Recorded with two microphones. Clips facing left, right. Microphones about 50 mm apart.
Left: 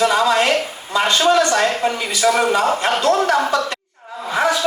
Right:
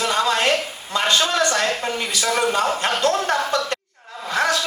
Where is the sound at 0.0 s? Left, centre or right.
Left.